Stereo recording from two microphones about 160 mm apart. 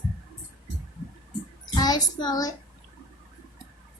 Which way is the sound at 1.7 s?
25° left (ahead or behind).